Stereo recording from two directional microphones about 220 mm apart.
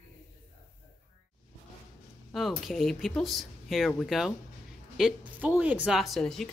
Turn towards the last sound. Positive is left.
turn(degrees=0)  # may be behind; listen again after turning